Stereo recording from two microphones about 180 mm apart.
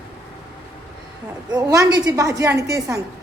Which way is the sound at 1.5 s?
20° right (ahead or behind).